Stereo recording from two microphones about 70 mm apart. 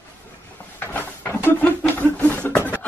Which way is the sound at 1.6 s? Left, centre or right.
Left.